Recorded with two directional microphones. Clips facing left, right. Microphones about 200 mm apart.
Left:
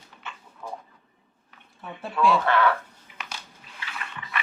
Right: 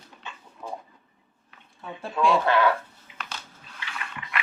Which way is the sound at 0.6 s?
15° right (ahead or behind).